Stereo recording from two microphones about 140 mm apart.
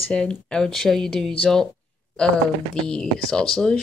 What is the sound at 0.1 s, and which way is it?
Speech, 5° left (ahead or behind).